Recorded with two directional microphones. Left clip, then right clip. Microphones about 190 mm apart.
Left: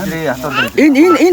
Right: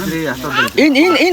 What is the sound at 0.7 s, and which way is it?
Speech, 20° left (ahead or behind).